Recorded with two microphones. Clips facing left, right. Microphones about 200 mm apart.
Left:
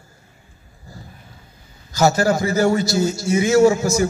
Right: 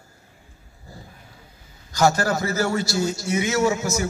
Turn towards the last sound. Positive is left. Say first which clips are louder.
# left 7 dB
turn(degrees=35)  # may be behind; listen again after turning